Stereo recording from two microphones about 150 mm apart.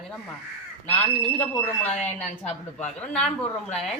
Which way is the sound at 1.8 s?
45° left (ahead or behind).